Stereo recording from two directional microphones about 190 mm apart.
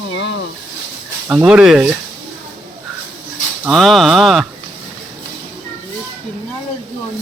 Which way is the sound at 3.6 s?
Centre (ahead or behind).